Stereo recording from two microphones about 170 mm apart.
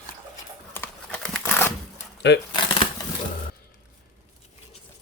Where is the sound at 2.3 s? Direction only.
90° left.